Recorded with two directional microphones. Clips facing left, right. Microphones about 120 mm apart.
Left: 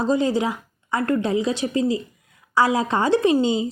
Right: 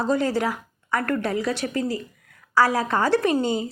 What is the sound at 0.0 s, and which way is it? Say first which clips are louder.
A woman's voice: left 2 dB; 20° left (ahead or behind).